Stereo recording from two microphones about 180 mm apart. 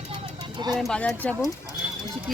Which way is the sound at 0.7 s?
5° left (ahead or behind).